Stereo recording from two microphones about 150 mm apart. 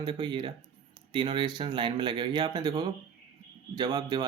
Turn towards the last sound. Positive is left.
turn(degrees=-25)  # may be behind; listen again after turning